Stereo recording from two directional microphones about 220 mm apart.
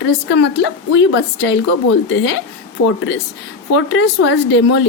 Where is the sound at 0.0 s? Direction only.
55° left (ahead or behind).